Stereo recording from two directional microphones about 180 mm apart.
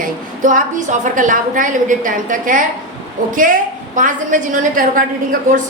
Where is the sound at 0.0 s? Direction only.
45° right (ahead or behind).